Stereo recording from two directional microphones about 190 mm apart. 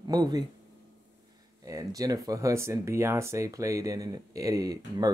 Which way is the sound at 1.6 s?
20° right (ahead or behind).